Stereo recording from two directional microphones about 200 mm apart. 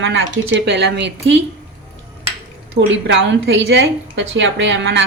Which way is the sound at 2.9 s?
65° right (ahead or behind).